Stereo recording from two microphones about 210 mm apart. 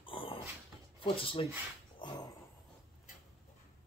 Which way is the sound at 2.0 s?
20° left (ahead or behind).